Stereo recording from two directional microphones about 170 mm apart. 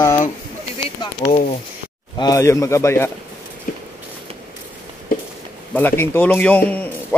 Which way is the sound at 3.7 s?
55° left (ahead or behind).